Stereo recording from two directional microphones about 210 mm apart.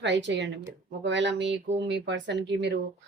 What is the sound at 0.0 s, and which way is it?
Speech, 55° right (ahead or behind).